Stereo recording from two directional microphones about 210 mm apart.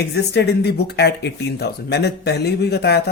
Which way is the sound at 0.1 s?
50° left (ahead or behind).